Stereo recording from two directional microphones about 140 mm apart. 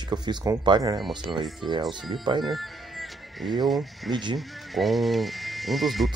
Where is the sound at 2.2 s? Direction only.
35° right (ahead or behind).